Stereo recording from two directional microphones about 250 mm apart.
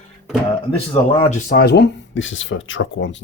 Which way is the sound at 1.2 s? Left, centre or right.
Left.